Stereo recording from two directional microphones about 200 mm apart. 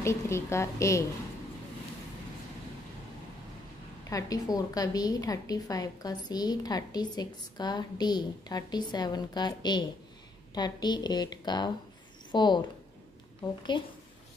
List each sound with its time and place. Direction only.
0.0 s a woman's voice: 15° left (ahead or behind)
4.1 s a woman's voice: 20° left (ahead or behind)
13.7 s a woman's voice: 25° left (ahead or behind)